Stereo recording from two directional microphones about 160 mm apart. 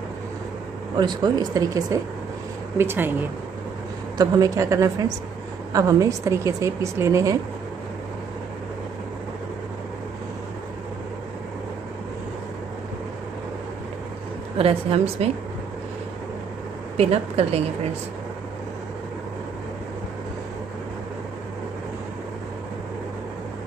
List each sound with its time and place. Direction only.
0.9 s a woman's voice: 25° right (ahead or behind)
14.6 s speech: 35° right (ahead or behind)
16.9 s speech: 40° right (ahead or behind)